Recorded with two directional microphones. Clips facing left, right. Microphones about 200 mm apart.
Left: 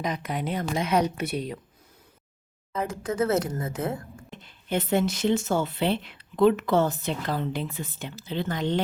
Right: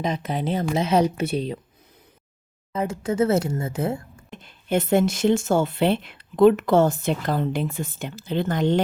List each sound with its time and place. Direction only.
0.0 s speech: 25° right (ahead or behind)
2.7 s speech: 25° right (ahead or behind)
4.7 s speech: 45° right (ahead or behind)